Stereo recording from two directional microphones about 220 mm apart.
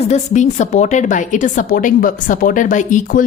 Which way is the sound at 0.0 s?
30° left (ahead or behind).